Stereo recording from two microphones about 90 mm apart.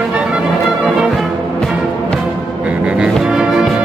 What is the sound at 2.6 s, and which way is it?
Music, 10° right (ahead or behind).